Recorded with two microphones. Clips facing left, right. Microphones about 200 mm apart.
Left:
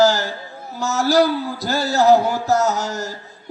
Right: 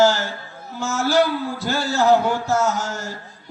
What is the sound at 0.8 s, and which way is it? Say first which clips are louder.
A man's voice: left 2 dB; 40° left (ahead or behind).